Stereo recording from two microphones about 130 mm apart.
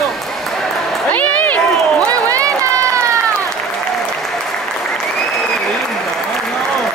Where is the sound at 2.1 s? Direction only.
25° right (ahead or behind).